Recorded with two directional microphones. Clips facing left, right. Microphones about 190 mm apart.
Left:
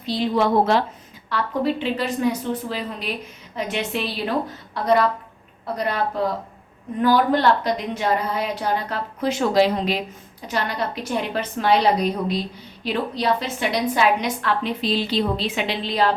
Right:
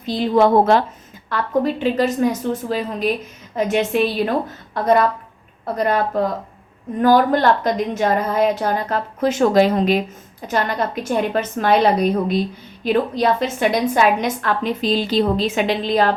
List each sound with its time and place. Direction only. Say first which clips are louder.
0.0 s a woman's voice: right 5 dB; 50° right (ahead or behind)